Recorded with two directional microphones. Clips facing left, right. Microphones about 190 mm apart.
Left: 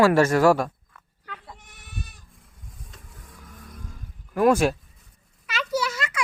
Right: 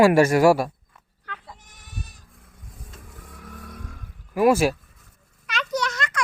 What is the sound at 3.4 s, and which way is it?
Vehicle, 65° right (ahead or behind).